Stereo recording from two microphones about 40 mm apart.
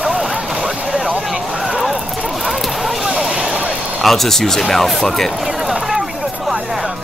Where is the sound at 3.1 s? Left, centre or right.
Right.